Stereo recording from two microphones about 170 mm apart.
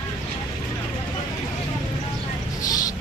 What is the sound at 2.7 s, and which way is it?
Mouse, 20° left (ahead or behind).